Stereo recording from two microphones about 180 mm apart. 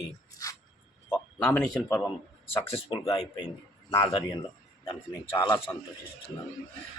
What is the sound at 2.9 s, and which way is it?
Speech, 20° left (ahead or behind).